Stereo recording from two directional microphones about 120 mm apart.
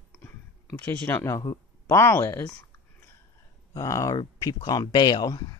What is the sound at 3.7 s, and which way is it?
Speech, 25° left (ahead or behind).